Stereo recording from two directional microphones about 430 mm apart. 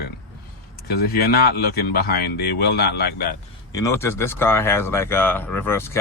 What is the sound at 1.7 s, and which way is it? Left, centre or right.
Speech, left.